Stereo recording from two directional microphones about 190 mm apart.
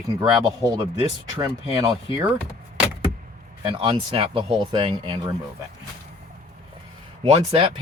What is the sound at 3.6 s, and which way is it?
Speech, 25° right (ahead or behind).